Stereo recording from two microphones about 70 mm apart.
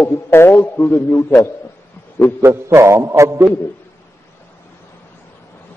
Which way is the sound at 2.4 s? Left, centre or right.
Right.